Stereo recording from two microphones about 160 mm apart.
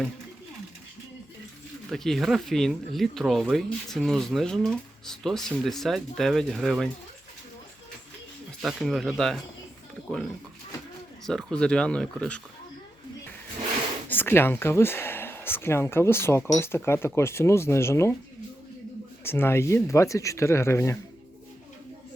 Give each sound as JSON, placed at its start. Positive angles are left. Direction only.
{"t": 1.9, "sound": "speech", "side_deg": 0}
{"t": 8.6, "sound": "speech", "side_deg": 0}
{"t": 11.3, "sound": "speech", "side_deg": 5}
{"t": 14.1, "sound": "speech", "side_deg": 15}
{"t": 19.2, "sound": "speech", "side_deg": 15}